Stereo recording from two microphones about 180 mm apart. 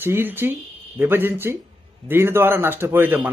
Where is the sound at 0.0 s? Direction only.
10° right (ahead or behind).